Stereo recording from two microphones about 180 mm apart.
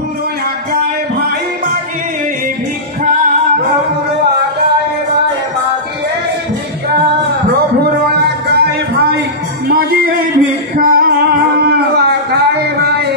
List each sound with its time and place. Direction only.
7.8 s music: 60° right (ahead or behind)
9.7 s music: 55° right (ahead or behind)